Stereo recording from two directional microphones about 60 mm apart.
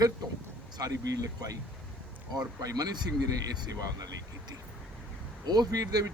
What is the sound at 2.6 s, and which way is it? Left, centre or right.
Speech, right.